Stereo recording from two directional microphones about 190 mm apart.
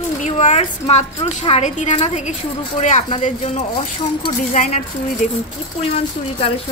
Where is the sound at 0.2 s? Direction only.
40° left (ahead or behind).